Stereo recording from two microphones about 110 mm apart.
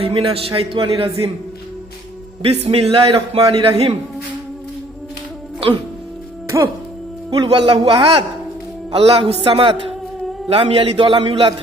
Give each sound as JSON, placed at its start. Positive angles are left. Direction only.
{"t": 0.0, "sound": "a man's voice", "side_deg": -60}
{"t": 2.4, "sound": "a man's voice", "side_deg": -65}
{"t": 7.4, "sound": "a man's voice", "side_deg": -55}